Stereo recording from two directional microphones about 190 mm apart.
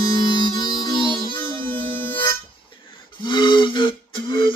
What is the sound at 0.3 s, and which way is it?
Music, 25° left (ahead or behind).